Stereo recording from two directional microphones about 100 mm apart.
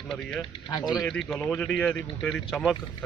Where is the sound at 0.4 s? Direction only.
50° left (ahead or behind).